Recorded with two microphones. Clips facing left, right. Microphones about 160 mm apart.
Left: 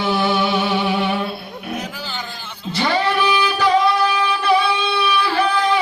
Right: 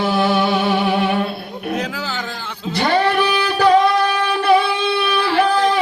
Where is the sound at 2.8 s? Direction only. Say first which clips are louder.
Right 2 dB; 50° right (ahead or behind).